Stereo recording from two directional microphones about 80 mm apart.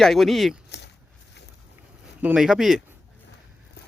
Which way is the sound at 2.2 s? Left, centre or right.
Centre.